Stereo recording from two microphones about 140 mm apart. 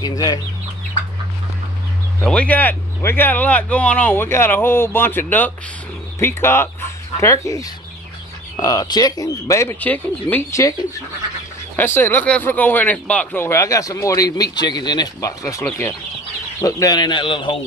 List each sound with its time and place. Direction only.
0.0 s speech: 30° left (ahead or behind)
2.2 s speech: 10° left (ahead or behind)
11.7 s speech: 15° left (ahead or behind); by 17.6 s 35° left (ahead or behind)